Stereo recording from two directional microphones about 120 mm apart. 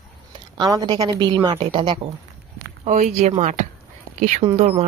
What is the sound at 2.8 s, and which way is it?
Speech, 70° right (ahead or behind).